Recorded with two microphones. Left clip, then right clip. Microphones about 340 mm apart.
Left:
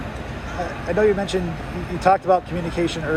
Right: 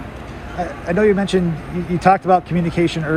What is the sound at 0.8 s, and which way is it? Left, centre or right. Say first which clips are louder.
Speech: right 3 dB; centre.